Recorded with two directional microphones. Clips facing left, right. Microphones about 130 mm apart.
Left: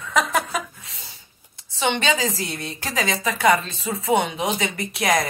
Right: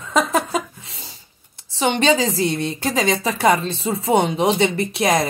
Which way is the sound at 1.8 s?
35° right (ahead or behind).